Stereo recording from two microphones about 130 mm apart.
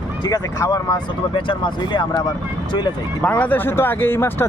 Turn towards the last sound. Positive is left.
turn(degrees=20)  # may be behind; listen again after turning